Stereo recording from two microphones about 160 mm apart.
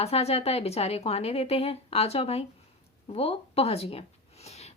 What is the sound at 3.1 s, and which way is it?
Speech, 40° left (ahead or behind).